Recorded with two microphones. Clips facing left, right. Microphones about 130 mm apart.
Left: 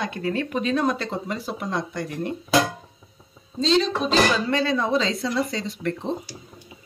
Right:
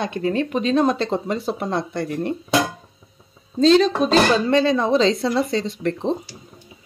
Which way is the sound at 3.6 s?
50° right (ahead or behind).